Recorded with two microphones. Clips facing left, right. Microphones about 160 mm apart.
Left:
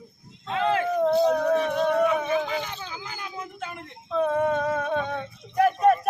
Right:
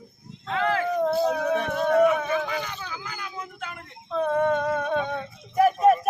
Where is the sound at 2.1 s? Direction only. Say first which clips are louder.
Left 1 dB; 15° left (ahead or behind).